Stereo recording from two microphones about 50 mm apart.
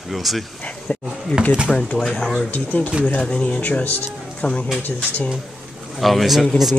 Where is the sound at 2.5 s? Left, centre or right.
Left.